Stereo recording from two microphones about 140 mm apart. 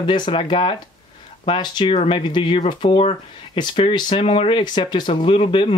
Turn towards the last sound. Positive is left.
turn(degrees=40)  # may be behind; listen again after turning